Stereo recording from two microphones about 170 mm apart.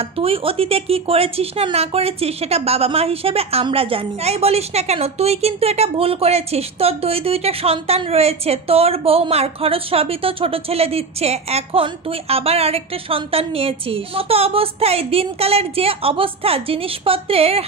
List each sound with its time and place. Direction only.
0.0 s speech: 35° right (ahead or behind)